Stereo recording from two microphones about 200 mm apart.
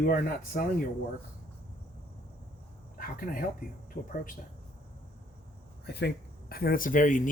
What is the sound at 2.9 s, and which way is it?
Speech, 45° left (ahead or behind).